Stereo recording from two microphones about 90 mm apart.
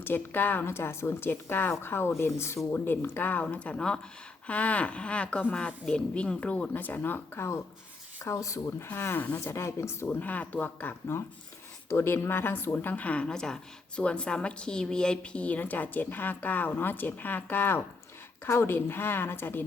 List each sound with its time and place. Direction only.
0.0 s a woman's voice: 20° left (ahead or behind)
8.9 s speech: 25° left (ahead or behind)
10.1 s a woman's voice: 15° left (ahead or behind)